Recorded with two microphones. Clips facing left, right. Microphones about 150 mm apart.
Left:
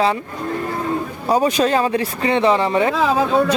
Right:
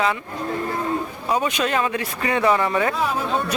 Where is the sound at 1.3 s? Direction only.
35° left (ahead or behind).